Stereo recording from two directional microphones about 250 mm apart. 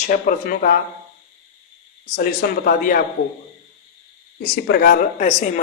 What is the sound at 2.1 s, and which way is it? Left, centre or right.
Speech, left.